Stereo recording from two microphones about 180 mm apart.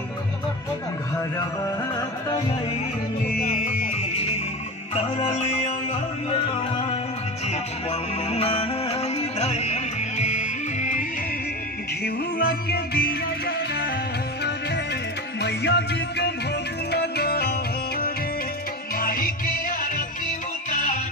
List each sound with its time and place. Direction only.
2.0 s music: 20° left (ahead or behind)
3.3 s music: 45° left (ahead or behind)
4.0 s music: 35° left (ahead or behind)
6.5 s music: 35° left (ahead or behind)
12.0 s music: 60° left (ahead or behind)
15.4 s music: 65° left (ahead or behind)
18.9 s music: 50° left (ahead or behind)